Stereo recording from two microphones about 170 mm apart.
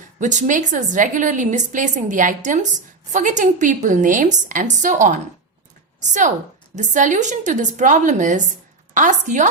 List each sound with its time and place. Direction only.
0.2 s a woman's voice: 45° right (ahead or behind)